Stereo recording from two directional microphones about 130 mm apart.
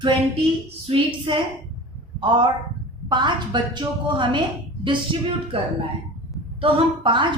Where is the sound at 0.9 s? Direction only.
40° right (ahead or behind).